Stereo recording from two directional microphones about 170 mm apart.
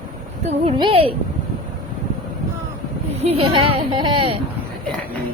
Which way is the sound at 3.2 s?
35° right (ahead or behind).